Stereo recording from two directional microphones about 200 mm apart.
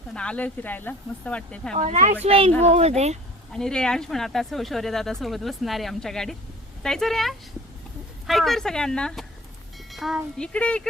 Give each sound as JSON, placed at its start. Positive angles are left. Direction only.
{"t": 0.1, "sound": "speech", "side_deg": 5}
{"t": 1.7, "sound": "speech", "side_deg": -35}
{"t": 3.5, "sound": "speech", "side_deg": 5}